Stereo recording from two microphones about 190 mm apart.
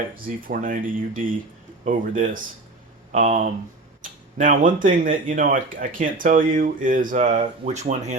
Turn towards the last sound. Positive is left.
turn(degrees=-35)  # may be behind; listen again after turning